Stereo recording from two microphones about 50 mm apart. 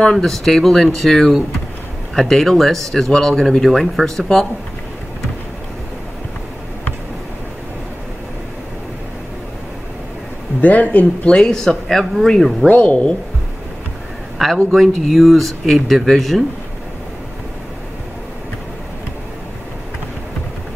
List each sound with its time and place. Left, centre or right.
0.0 s speech: centre
10.6 s speech: left
11.2 s speech: centre
12.6 s a woman's voice: left
14.4 s speech: centre